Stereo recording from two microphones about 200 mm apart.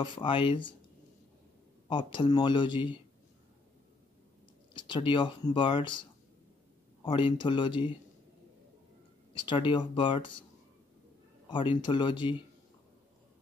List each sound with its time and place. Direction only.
0.0 s speech: 25° left (ahead or behind)
1.9 s speech: 25° left (ahead or behind)
4.7 s speech: 25° left (ahead or behind)
7.1 s speech: 25° left (ahead or behind)
9.3 s speech: 25° left (ahead or behind)
11.4 s speech: 25° left (ahead or behind)